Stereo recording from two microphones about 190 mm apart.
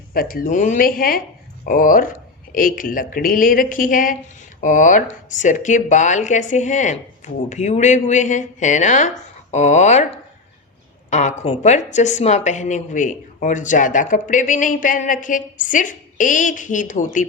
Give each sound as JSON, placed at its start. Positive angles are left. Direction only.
{"t": 0.1, "sound": "speech", "side_deg": 50}